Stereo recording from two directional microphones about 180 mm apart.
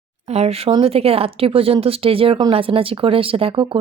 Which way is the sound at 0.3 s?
35° right (ahead or behind).